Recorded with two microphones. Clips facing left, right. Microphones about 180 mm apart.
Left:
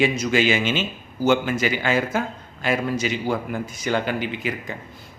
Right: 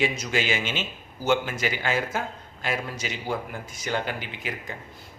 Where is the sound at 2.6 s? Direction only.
80° left.